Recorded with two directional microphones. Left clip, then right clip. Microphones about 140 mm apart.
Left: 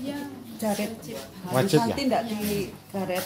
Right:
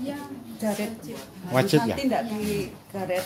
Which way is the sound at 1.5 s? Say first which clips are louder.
Right 1 dB; 20° right (ahead or behind).